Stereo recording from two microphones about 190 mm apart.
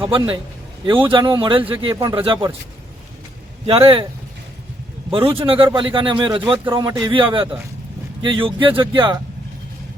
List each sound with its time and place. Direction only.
0.0 s speech: 25° right (ahead or behind)
3.7 s speech: 30° right (ahead or behind)
5.1 s speech: 30° right (ahead or behind)